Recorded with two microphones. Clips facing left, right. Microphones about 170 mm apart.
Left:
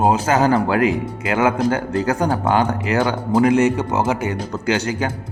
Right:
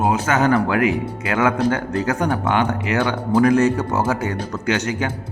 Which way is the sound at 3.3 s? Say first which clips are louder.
Even; 25° left (ahead or behind).